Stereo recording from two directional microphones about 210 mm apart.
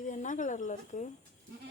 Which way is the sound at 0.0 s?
35° left (ahead or behind).